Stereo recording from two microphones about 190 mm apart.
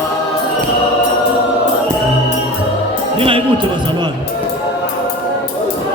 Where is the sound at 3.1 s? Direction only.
30° right (ahead or behind).